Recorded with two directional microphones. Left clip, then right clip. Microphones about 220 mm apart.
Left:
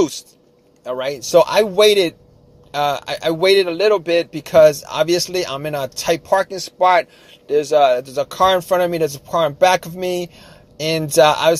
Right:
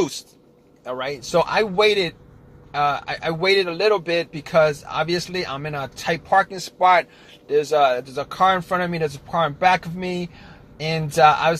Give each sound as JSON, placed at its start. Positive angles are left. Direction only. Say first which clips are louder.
{"t": 0.8, "sound": "a man's voice", "louder": "left 5 dB", "side_deg": 45}